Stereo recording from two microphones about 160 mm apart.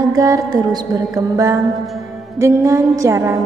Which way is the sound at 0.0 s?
20° right (ahead or behind).